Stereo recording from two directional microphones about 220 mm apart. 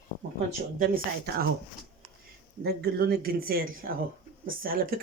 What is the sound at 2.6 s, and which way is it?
Speech, 45° right (ahead or behind).